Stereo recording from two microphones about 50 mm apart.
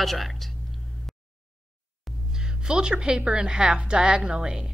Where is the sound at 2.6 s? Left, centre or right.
Centre.